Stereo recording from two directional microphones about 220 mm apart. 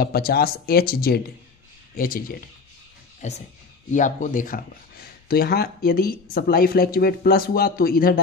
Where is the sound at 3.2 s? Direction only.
30° left (ahead or behind).